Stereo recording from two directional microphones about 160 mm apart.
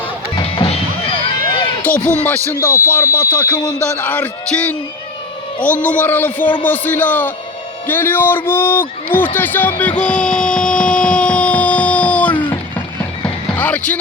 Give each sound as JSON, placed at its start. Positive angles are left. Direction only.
{"t": 0.3, "sound": "music", "side_deg": 35}
{"t": 2.5, "sound": "a man's voice", "side_deg": 15}
{"t": 10.0, "sound": "a sound", "side_deg": 5}
{"t": 12.4, "sound": "music", "side_deg": 10}
{"t": 13.6, "sound": "speech", "side_deg": 10}